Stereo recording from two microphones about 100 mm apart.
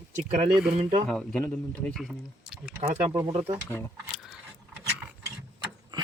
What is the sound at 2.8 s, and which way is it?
Speech, 90° right.